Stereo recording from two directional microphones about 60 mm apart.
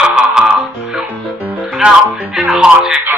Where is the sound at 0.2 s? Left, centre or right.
Centre.